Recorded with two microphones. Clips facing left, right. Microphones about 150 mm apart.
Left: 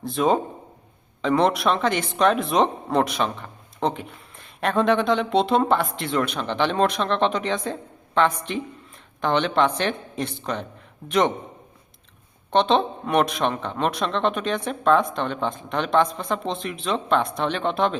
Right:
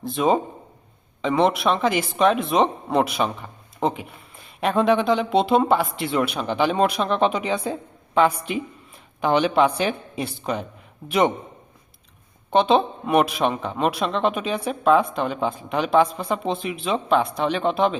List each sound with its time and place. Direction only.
0.0 s speech: centre (ahead or behind)
12.5 s speech: 5° right (ahead or behind)